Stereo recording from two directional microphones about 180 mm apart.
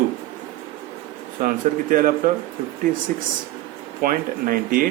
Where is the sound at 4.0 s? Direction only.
50° right (ahead or behind).